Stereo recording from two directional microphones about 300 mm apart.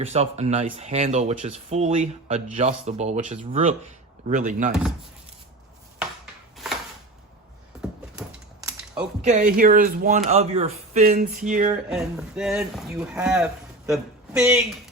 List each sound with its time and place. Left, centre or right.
0.0 s speech: right
9.2 s speech: right
11.9 s speech: centre